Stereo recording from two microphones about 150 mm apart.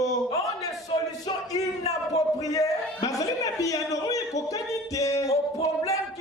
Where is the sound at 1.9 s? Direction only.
25° left (ahead or behind).